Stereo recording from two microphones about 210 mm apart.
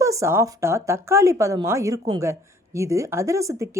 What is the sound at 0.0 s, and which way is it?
Speech, 15° right (ahead or behind).